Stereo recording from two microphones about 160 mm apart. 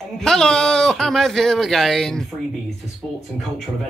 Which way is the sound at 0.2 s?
5° left (ahead or behind).